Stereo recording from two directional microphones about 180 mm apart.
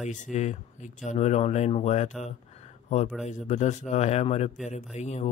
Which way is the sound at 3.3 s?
40° left (ahead or behind).